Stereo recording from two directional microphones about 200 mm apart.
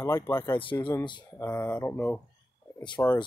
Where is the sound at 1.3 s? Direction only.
10° left (ahead or behind).